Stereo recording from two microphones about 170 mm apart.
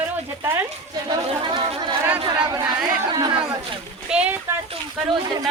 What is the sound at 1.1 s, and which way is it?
Speech, 30° right (ahead or behind).